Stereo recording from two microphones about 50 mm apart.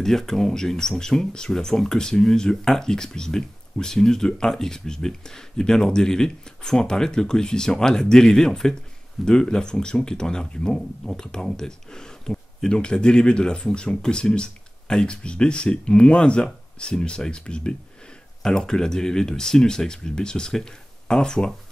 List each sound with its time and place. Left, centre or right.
0.0 s speech: centre